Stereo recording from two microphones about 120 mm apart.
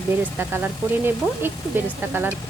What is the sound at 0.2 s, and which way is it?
Speech, 15° right (ahead or behind).